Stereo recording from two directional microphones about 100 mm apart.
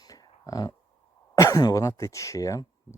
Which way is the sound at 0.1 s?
35° left (ahead or behind).